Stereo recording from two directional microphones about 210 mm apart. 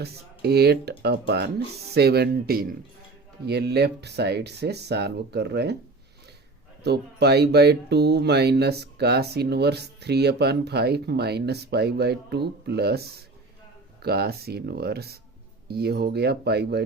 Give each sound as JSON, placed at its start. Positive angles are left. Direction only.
{"t": 0.0, "sound": "speech", "side_deg": -50}
{"t": 6.8, "sound": "speech", "side_deg": -50}